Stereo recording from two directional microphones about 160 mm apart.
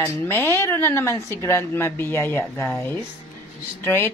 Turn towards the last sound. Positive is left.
turn(degrees=15)  # may be behind; listen again after turning